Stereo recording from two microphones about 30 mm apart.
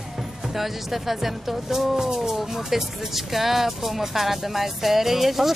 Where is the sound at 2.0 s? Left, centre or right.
Centre.